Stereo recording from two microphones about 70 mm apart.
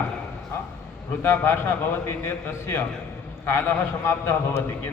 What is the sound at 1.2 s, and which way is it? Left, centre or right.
A man's voice, left.